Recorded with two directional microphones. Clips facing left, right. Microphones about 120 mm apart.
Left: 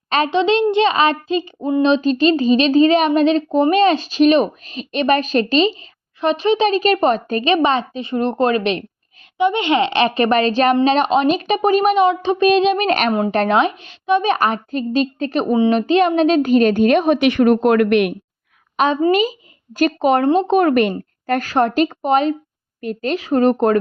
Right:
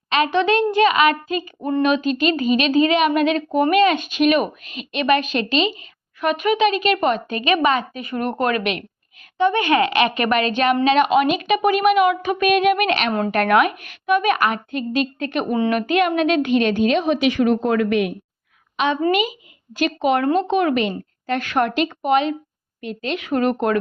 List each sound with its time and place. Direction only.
0.3 s a woman's voice: 20° left (ahead or behind)
12.9 s a woman's voice: 45° left (ahead or behind)
13.3 s a woman's voice: 25° left (ahead or behind); by 18.1 s 65° left (ahead or behind)
18.8 s a woman's voice: 45° left (ahead or behind)
21.5 s a woman's voice: 35° left (ahead or behind)